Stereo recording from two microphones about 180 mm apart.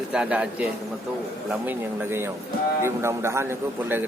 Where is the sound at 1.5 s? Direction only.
10° right (ahead or behind).